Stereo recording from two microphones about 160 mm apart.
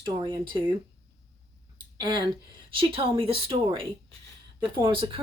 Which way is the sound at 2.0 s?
25° right (ahead or behind).